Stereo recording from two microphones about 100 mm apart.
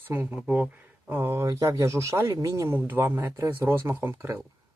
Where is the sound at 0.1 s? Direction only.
20° right (ahead or behind).